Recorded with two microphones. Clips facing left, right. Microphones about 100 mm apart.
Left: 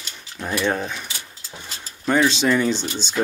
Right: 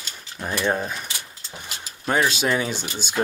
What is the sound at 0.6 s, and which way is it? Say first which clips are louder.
Speech: right 2 dB; 5° right (ahead or behind).